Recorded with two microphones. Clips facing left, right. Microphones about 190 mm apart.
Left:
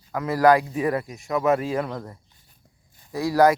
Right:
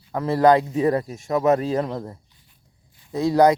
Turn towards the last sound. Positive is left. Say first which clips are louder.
# right 2 dB
turn(degrees=-20)  # may be behind; listen again after turning